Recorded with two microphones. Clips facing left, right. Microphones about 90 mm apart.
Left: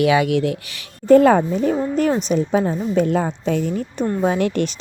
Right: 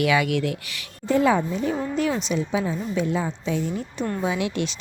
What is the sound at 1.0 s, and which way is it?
Speech, 50° left (ahead or behind).